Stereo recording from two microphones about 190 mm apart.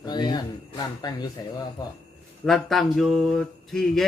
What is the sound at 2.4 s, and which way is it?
Speech, centre (ahead or behind).